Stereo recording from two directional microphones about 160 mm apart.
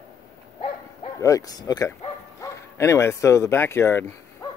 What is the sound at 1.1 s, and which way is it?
Speech, 20° left (ahead or behind).